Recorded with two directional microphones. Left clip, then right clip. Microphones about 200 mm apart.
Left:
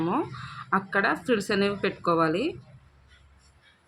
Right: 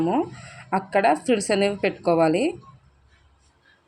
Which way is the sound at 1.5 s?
35° left (ahead or behind).